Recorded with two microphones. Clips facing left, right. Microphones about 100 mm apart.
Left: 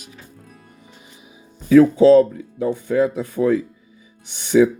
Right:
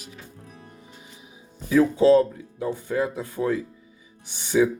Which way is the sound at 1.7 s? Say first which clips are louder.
Left 6 dB; 75° left (ahead or behind).